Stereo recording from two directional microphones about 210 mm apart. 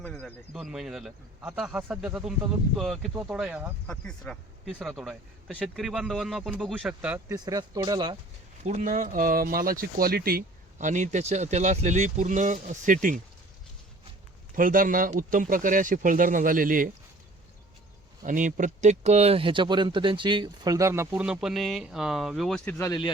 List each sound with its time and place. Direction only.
0.0 s a man's voice: 5° left (ahead or behind)
7.3 s speech: 20° right (ahead or behind)
8.6 s speech: 35° right (ahead or behind)
14.5 s speech: 40° right (ahead or behind)
18.2 s speech: 40° right (ahead or behind); by 23.1 s 20° left (ahead or behind)